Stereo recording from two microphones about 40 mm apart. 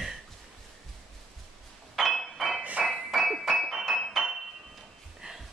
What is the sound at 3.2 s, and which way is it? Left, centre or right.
Music, centre.